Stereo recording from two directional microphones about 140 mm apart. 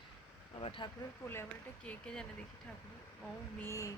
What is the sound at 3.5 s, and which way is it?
Speech, 20° left (ahead or behind).